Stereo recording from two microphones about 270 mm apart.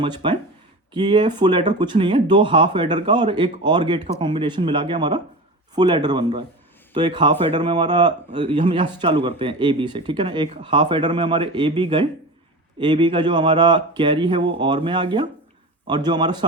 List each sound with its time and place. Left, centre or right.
0.0 s speech: centre